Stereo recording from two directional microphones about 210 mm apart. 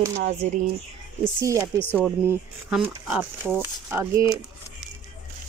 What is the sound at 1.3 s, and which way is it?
Speech, 15° right (ahead or behind).